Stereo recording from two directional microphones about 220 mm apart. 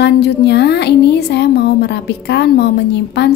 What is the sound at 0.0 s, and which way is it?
A woman's voice, 50° left (ahead or behind).